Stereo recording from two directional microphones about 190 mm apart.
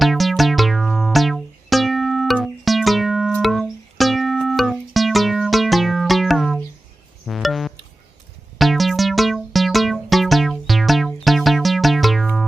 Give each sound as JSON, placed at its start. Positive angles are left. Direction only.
{"t": 0.0, "sound": "music", "side_deg": 0}